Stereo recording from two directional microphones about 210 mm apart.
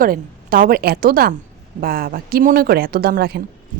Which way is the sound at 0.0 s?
40° right (ahead or behind).